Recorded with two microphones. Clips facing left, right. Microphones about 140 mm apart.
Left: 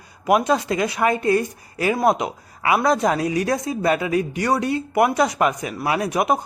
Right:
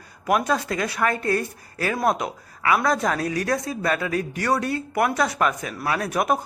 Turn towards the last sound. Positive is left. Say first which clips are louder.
# left 3 dB
turn(degrees=15)  # may be behind; listen again after turning